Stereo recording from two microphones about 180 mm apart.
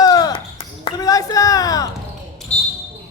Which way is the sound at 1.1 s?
20° left (ahead or behind).